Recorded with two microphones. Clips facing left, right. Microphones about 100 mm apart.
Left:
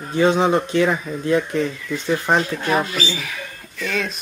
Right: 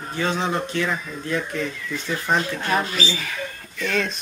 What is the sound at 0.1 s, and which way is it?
Speech, 15° left (ahead or behind).